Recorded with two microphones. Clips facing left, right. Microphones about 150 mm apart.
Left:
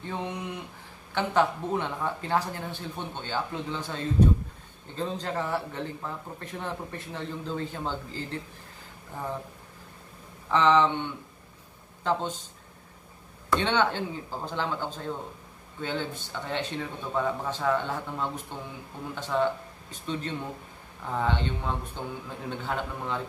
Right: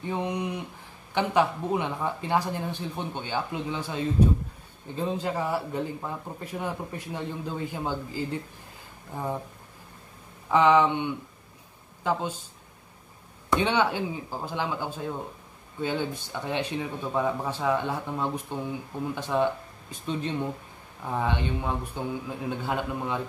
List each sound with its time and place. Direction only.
0.0 s speech: 15° right (ahead or behind)
10.5 s speech: 10° right (ahead or behind)
13.5 s speech: 10° right (ahead or behind)